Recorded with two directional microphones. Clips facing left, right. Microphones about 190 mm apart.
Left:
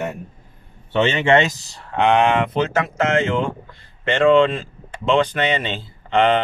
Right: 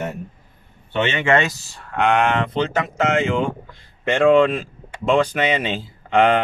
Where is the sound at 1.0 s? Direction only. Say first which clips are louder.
Left 2 dB; 30° left (ahead or behind); by 2.6 s 15° left (ahead or behind).